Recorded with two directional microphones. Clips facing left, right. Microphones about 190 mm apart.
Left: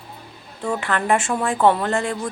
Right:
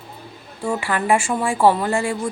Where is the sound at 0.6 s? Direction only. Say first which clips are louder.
Right 1 dB; 10° right (ahead or behind).